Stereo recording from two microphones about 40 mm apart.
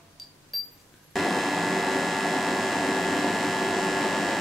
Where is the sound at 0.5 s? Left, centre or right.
Centre.